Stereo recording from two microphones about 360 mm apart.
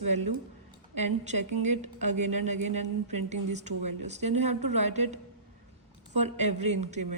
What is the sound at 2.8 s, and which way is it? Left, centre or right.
Speech, right.